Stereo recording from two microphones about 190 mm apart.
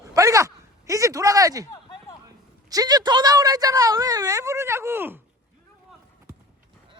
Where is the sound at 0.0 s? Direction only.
15° right (ahead or behind).